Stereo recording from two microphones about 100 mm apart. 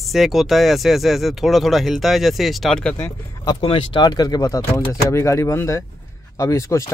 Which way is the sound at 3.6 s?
65° left (ahead or behind).